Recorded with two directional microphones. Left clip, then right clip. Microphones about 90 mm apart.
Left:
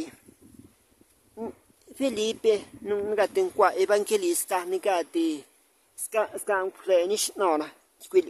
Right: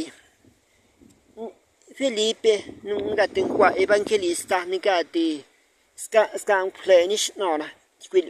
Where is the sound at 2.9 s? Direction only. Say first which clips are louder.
Right 2 dB; 20° left (ahead or behind).